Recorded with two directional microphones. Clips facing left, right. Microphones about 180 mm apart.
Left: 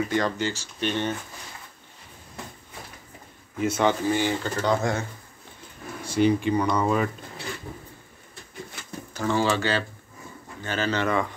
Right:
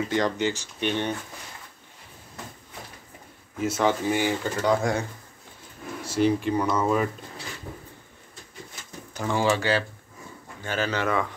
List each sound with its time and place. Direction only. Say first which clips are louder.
0.0 s speech: right 1 dB; 20° right (ahead or behind)
3.5 s speech: left 1 dB; centre (ahead or behind)
4.1 s speech: even; 10° right (ahead or behind)
6.0 s speech: left 1 dB; centre (ahead or behind)
9.1 s speech: even; 15° right (ahead or behind)